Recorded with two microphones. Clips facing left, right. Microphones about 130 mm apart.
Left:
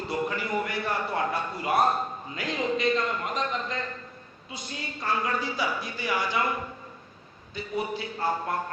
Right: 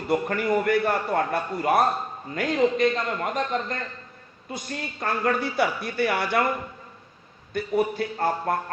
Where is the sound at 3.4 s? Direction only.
50° right (ahead or behind).